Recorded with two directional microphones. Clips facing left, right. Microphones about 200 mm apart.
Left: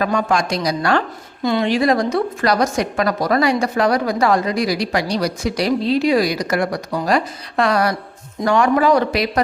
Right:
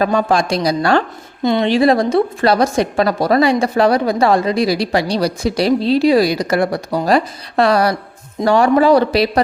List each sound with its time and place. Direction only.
0.0 s a woman's voice: 35° right (ahead or behind)